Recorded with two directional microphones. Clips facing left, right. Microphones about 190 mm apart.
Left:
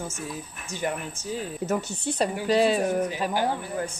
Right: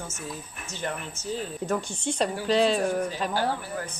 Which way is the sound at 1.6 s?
5° left (ahead or behind).